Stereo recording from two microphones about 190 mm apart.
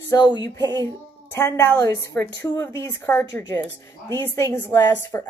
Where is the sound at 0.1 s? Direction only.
20° left (ahead or behind).